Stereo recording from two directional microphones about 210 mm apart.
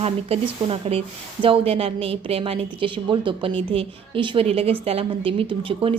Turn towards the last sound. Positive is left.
turn(degrees=-25)  # may be behind; listen again after turning